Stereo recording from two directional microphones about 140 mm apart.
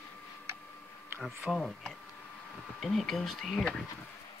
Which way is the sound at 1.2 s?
Centre (ahead or behind).